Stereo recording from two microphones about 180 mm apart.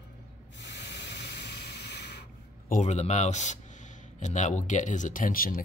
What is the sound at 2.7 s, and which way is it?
Speech, 40° left (ahead or behind).